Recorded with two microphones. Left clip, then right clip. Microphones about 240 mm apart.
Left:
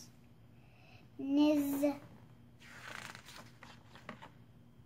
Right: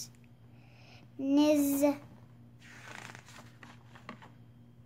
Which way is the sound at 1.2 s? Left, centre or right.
Right.